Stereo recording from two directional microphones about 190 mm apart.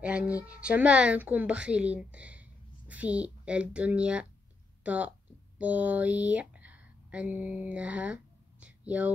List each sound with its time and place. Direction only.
0.0 s a woman's voice: 5° right (ahead or behind)